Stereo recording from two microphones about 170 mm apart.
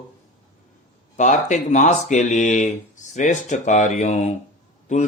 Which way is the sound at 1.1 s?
45° left (ahead or behind).